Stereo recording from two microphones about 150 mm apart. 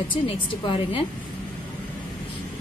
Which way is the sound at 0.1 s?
35° left (ahead or behind).